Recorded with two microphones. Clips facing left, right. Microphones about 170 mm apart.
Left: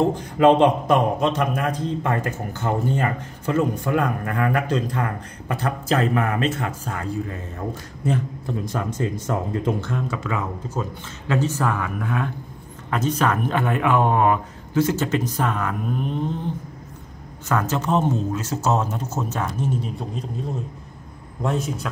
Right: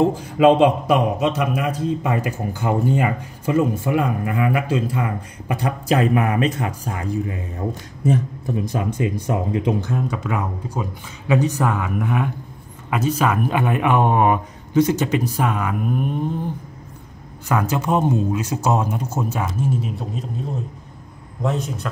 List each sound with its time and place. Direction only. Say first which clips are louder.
0.1 s a man's voice: right 1 dB; 10° right (ahead or behind)
17.5 s a man's voice: right 2 dB; 10° right (ahead or behind)
21.4 s a man's voice: right 1 dB; centre (ahead or behind)